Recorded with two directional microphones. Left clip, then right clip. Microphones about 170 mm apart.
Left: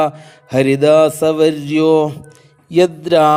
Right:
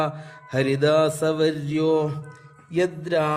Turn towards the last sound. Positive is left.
turn(degrees=40)  # may be behind; listen again after turning